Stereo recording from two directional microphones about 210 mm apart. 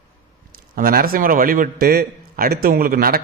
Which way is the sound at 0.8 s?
45° right (ahead or behind).